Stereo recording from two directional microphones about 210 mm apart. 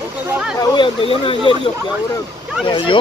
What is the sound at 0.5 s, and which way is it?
Speech, 20° left (ahead or behind).